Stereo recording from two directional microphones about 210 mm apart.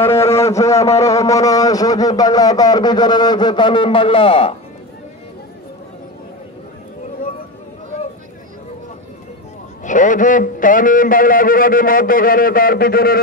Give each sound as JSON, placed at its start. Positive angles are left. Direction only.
{"t": 0.0, "sound": "a man's voice", "side_deg": 10}
{"t": 9.8, "sound": "a man's voice", "side_deg": 40}